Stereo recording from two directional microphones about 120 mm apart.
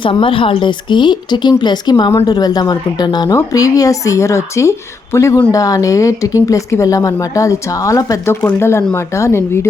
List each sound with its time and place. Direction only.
0.0 s a woman's voice: 45° left (ahead or behind); by 9.4 s 25° left (ahead or behind)